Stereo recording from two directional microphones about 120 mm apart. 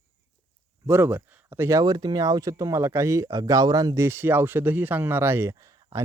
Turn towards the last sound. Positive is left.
turn(degrees=-20)  # may be behind; listen again after turning